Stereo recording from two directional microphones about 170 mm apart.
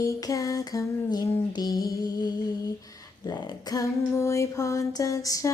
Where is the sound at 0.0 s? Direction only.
20° left (ahead or behind).